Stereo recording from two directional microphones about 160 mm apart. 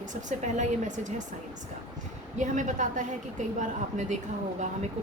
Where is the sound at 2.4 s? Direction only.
50° right (ahead or behind).